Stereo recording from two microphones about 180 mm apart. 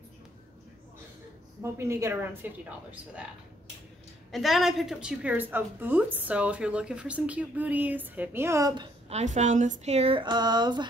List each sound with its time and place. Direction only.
1.6 s a woman's voice: 15° right (ahead or behind)
4.3 s a woman's voice: centre (ahead or behind); by 8.8 s 20° right (ahead or behind)
9.1 s a woman's voice: 40° right (ahead or behind); by 10.9 s 25° right (ahead or behind)